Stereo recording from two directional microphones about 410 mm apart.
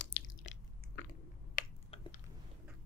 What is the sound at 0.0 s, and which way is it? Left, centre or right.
Chewing, left.